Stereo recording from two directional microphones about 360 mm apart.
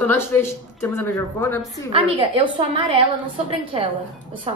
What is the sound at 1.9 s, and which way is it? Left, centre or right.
A woman's voice, centre.